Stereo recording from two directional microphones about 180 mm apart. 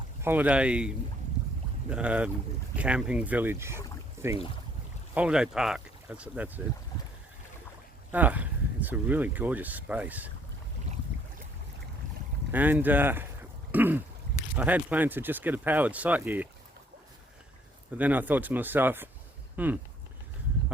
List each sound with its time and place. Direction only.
0.2 s speech: 10° right (ahead or behind)
8.1 s speech: 10° right (ahead or behind)
12.5 s speech: 10° right (ahead or behind)
13.7 s throat clearing: 10° right (ahead or behind)
14.6 s speech: 10° right (ahead or behind)
17.9 s speech: 10° right (ahead or behind)